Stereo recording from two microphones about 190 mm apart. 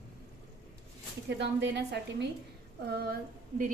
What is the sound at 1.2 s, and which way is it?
A woman's voice, 65° right (ahead or behind).